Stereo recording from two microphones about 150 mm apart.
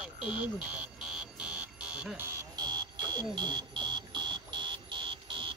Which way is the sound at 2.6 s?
30° right (ahead or behind).